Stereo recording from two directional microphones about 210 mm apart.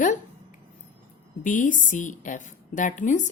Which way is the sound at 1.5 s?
40° left (ahead or behind).